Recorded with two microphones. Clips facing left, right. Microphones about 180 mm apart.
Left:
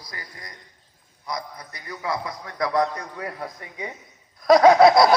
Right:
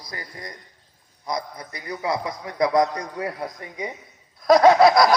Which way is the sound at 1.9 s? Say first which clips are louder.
Right 3 dB; 20° right (ahead or behind).